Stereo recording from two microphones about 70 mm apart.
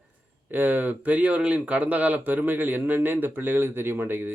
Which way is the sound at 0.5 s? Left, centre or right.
Right.